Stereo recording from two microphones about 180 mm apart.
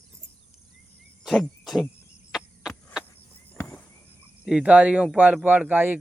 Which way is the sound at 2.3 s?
Centre (ahead or behind).